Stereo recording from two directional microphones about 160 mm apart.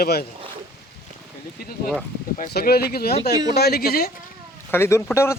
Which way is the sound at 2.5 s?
80° left.